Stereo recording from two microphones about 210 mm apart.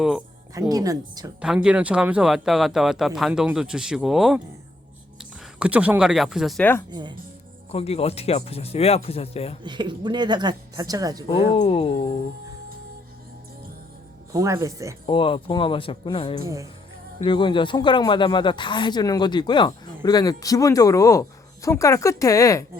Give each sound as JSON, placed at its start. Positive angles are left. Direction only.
{"t": 0.0, "sound": "speech", "side_deg": -5}
{"t": 0.7, "sound": "speech", "side_deg": -15}
{"t": 1.4, "sound": "speech", "side_deg": -5}
{"t": 7.7, "sound": "speech", "side_deg": 30}
{"t": 9.6, "sound": "a woman's voice", "side_deg": -20}
{"t": 11.3, "sound": "speech", "side_deg": 30}
{"t": 14.3, "sound": "speech", "side_deg": -15}
{"t": 15.0, "sound": "speech", "side_deg": 25}